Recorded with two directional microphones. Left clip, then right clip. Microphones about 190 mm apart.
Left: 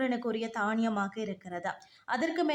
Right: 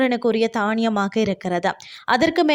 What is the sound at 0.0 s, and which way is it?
Speech, 40° right (ahead or behind).